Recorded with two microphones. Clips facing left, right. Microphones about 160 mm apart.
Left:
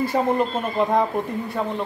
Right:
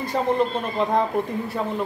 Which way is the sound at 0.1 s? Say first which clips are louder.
Left 1 dB; 10° left (ahead or behind).